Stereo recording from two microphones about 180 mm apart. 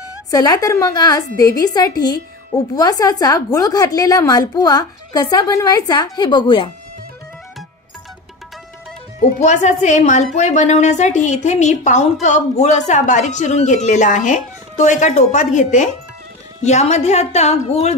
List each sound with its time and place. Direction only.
0.3 s a woman's voice: 20° left (ahead or behind)
9.4 s speech: 40° left (ahead or behind)